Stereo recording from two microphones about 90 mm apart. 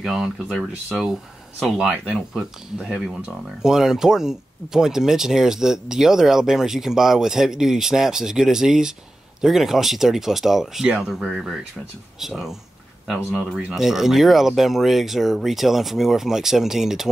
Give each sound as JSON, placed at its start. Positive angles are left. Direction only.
{"t": 0.0, "sound": "speech", "side_deg": -5}
{"t": 1.9, "sound": "speech", "side_deg": -15}
{"t": 3.6, "sound": "speech", "side_deg": -5}